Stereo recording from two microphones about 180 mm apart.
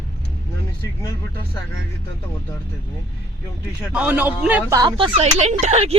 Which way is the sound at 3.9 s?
10° right (ahead or behind).